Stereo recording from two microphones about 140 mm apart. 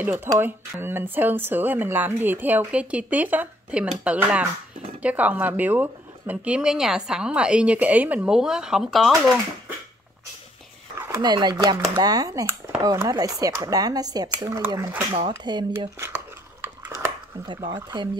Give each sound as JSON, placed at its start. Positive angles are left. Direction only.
{"t": 0.0, "sound": "speech", "side_deg": -15}
{"t": 11.0, "sound": "speech", "side_deg": -25}
{"t": 17.5, "sound": "speech", "side_deg": -35}